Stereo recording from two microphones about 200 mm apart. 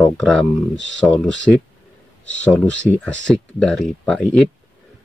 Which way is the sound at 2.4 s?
5° left (ahead or behind).